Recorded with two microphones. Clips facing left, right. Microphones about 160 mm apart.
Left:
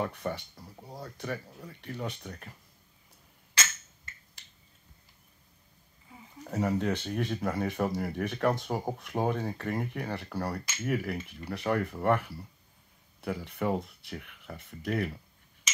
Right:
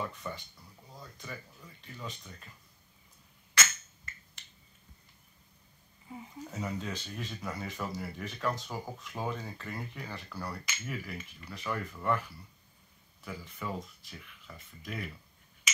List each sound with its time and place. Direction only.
0.0 s speech: 65° left (ahead or behind)
0.6 s a sound: 35° left (ahead or behind)
0.9 s speech: 70° left (ahead or behind)
6.4 s speech: 55° left (ahead or behind)